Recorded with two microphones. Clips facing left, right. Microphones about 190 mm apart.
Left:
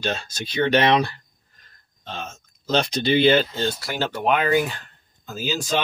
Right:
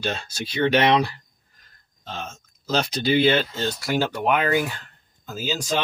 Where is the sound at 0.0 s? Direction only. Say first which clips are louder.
Left 1 dB; 10° right (ahead or behind).